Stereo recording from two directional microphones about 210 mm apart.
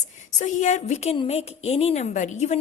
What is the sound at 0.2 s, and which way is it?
A woman's voice, 35° left (ahead or behind).